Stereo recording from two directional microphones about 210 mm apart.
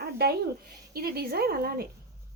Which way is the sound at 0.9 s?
45° right (ahead or behind).